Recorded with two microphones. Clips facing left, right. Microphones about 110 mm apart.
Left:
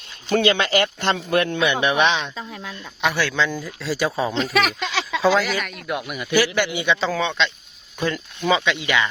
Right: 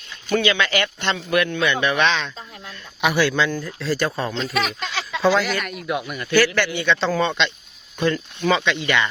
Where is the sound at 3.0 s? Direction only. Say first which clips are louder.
Right 2 dB; 10° right (ahead or behind).